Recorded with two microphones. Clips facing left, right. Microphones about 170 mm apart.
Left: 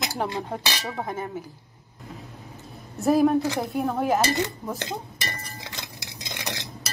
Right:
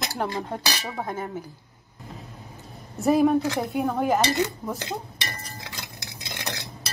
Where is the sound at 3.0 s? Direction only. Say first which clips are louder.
Even; centre (ahead or behind).